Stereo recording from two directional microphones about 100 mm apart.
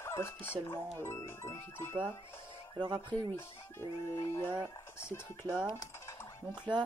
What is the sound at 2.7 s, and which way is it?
Speech, 50° right (ahead or behind).